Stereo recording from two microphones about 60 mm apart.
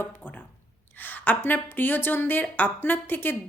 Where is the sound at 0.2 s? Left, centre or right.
Left.